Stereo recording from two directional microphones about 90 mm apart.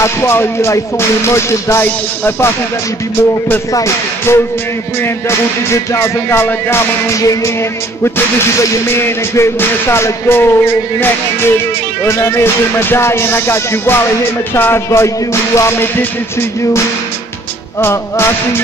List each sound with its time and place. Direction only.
0.0 s music: 30° left (ahead or behind)
3.7 s music: 35° left (ahead or behind)
5.7 s music: 30° left (ahead or behind)
12.8 s music: 30° left (ahead or behind)
17.7 s music: 25° left (ahead or behind)